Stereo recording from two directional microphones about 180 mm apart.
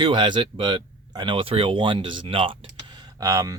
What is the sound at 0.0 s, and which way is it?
Speech, 25° right (ahead or behind).